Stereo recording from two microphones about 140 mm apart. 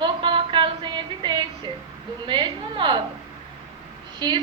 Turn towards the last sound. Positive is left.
turn(degrees=-35)  # may be behind; listen again after turning